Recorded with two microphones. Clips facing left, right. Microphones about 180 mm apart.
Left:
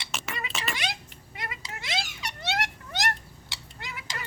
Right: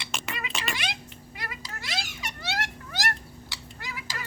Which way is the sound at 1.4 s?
25° left (ahead or behind).